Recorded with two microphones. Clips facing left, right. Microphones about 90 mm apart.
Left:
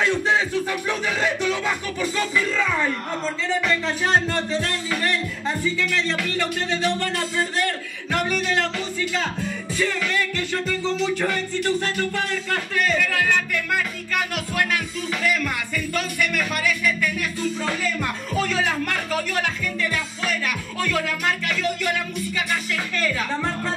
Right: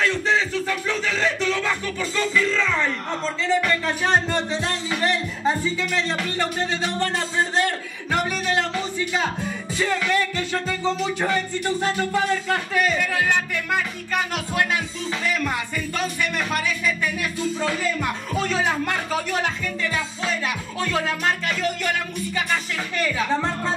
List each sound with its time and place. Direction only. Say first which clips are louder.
0.0 s music: left 1 dB; 15° left (ahead or behind)
3.8 s music: even; 15° right (ahead or behind)
8.3 s music: even; 10° right (ahead or behind)
11.1 s a sound: right 1 dB; 20° right (ahead or behind)
18.0 s music: even; 20° right (ahead or behind)
23.0 s music: right 3 dB; 20° right (ahead or behind)